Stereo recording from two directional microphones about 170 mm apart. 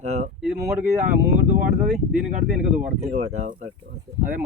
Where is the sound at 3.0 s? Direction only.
40° right (ahead or behind).